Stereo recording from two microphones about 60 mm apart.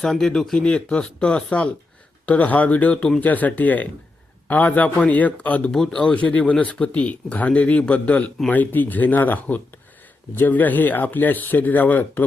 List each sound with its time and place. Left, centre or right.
0.0 s speech: centre; by 5.7 s left
5.7 s speech: centre
6.1 s speech: left